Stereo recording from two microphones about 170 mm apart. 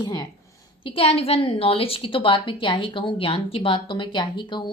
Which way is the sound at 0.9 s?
35° left (ahead or behind).